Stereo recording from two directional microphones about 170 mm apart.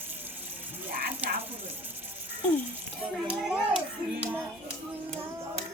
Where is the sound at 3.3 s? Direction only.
5° right (ahead or behind).